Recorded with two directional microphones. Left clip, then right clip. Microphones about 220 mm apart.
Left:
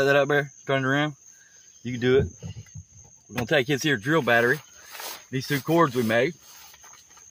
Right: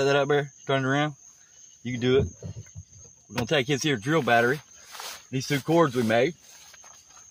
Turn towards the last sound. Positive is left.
turn(degrees=0)  # may be behind; listen again after turning